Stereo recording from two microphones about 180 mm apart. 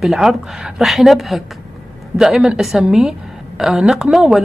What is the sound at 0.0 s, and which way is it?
A woman's voice, centre (ahead or behind).